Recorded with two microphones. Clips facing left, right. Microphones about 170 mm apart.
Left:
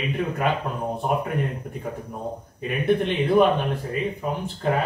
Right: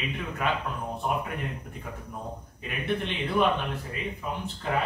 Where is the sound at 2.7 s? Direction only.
45° left (ahead or behind).